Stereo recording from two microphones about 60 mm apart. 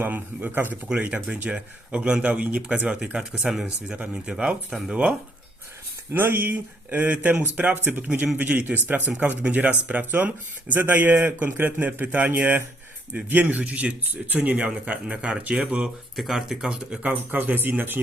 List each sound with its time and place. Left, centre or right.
0.0 s speech: right
0.9 s speech: right
3.9 s speech: right
6.1 s speech: right; by 15.6 s centre
16.1 s speech: centre
17.1 s speech: right